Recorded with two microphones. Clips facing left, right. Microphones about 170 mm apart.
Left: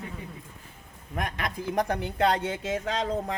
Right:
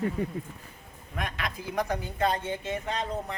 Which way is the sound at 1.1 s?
45° left (ahead or behind).